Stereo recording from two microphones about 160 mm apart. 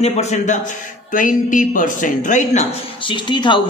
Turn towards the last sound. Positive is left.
turn(degrees=30)  # may be behind; listen again after turning